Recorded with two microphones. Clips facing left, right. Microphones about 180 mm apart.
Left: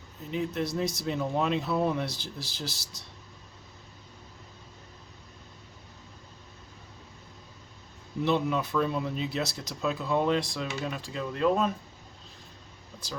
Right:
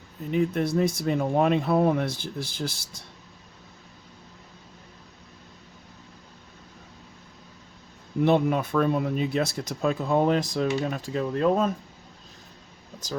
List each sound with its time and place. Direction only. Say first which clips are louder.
0.3 s speech: right 6 dB; 55° right (ahead or behind)
8.2 s speech: right 5 dB; 55° right (ahead or behind)